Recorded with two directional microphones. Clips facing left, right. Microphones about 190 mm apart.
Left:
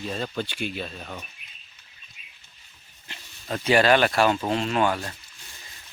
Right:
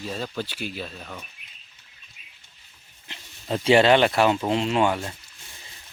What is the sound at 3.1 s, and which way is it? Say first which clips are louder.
Speech: right 3 dB; 25° right (ahead or behind).